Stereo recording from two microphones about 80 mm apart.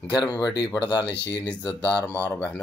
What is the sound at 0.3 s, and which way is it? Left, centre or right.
Speech, left.